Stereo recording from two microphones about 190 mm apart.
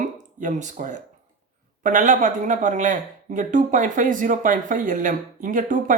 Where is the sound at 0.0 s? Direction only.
40° right (ahead or behind).